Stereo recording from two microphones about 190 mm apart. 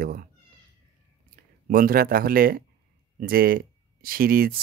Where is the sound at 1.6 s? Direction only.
50° right (ahead or behind).